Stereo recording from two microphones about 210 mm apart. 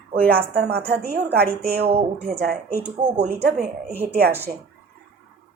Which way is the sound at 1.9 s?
30° right (ahead or behind).